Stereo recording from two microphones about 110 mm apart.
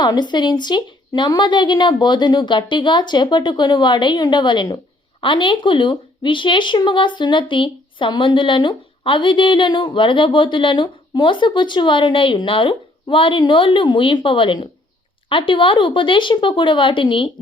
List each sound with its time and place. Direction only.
0.0 s speech: 40° left (ahead or behind)